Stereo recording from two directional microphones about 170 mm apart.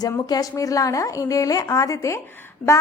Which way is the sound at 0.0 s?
20° left (ahead or behind).